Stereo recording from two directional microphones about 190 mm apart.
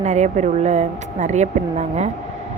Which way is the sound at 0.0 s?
40° right (ahead or behind).